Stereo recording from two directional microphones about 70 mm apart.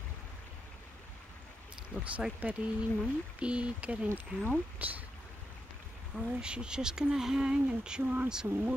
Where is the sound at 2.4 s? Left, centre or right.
Centre.